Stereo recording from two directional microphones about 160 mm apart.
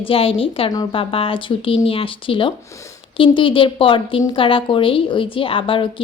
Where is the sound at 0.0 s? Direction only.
35° left (ahead or behind).